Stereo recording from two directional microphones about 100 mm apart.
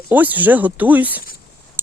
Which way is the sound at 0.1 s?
15° right (ahead or behind).